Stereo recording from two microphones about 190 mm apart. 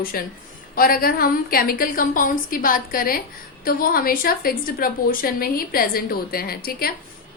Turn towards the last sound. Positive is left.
turn(degrees=50)  # may be behind; listen again after turning